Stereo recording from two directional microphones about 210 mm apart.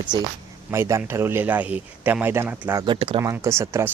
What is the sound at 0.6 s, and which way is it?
Speech, 10° right (ahead or behind).